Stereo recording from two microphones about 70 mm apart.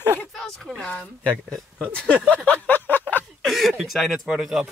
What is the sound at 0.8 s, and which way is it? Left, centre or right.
Speech, centre.